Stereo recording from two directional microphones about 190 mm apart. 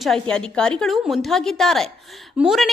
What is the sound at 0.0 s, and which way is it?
A woman's voice, 5° left (ahead or behind).